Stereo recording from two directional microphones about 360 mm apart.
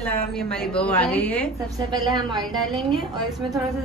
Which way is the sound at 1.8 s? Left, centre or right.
Centre.